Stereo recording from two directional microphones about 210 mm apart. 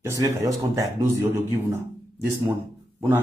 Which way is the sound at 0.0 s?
15° right (ahead or behind).